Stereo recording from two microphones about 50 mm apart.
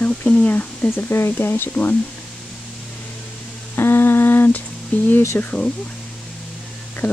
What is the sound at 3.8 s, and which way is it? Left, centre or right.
Humming, left.